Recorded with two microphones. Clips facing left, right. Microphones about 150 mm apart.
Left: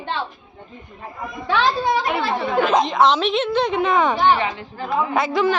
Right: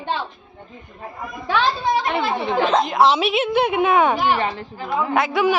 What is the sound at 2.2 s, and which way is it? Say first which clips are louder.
A woman's voice: even; centre (ahead or behind).